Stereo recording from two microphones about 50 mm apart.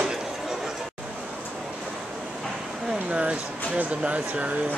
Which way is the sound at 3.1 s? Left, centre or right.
Right.